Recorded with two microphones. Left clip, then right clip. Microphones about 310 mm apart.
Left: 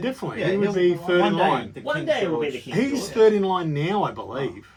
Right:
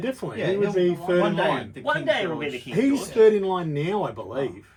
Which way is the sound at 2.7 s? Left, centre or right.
Centre.